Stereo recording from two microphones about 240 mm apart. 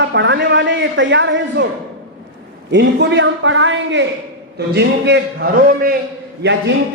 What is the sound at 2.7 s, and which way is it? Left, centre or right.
A man's voice, right.